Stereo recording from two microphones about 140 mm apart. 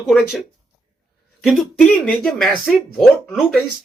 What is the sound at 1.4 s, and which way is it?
Speech, 5° left (ahead or behind).